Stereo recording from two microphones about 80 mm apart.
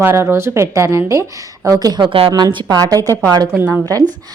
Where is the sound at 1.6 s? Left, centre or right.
Right.